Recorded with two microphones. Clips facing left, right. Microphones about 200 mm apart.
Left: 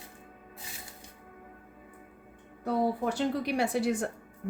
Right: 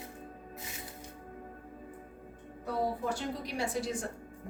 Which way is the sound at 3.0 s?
65° left (ahead or behind).